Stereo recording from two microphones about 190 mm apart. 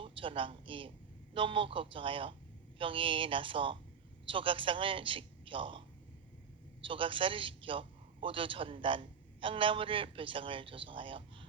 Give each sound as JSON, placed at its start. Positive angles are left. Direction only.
{"t": 0.0, "sound": "a man's voice", "side_deg": -25}
{"t": 6.8, "sound": "a man's voice", "side_deg": -25}